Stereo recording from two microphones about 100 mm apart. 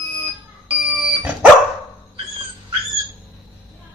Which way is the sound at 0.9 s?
15° right (ahead or behind).